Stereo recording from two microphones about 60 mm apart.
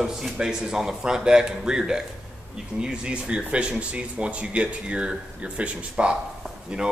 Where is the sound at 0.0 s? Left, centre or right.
Centre.